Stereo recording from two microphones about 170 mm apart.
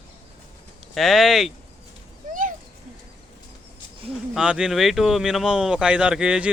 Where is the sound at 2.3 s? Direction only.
50° right (ahead or behind).